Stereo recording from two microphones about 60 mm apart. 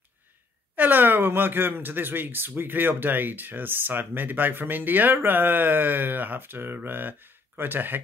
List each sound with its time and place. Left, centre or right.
0.7 s speech: right